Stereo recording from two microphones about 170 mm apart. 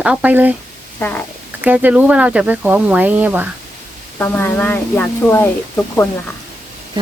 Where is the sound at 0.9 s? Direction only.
10° left (ahead or behind).